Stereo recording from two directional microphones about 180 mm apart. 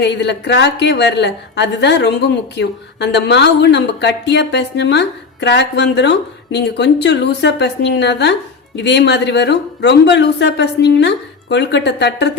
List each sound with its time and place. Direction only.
0.0 s speech: 70° left (ahead or behind)